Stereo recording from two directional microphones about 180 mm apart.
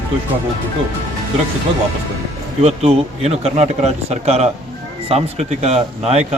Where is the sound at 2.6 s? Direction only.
35° right (ahead or behind).